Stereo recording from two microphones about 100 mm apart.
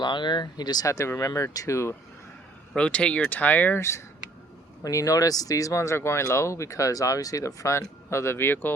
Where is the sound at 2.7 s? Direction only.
10° left (ahead or behind).